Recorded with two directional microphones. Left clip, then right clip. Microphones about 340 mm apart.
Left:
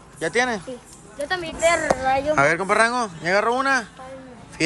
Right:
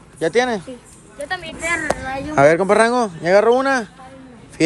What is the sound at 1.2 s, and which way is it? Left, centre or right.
Speech, left.